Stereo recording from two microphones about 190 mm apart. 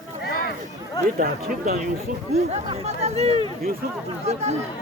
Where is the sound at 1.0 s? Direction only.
50° right (ahead or behind).